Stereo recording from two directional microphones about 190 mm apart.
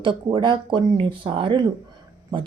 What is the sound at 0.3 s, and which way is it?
Speech, 25° right (ahead or behind).